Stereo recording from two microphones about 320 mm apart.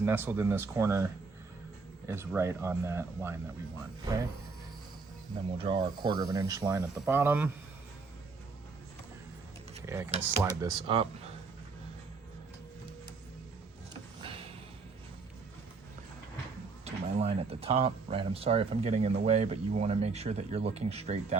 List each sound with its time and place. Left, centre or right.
0.0 s speech: centre
2.0 s speech: centre
5.5 s speech: centre
9.8 s speech: centre
14.2 s a sound: centre
16.8 s speech: centre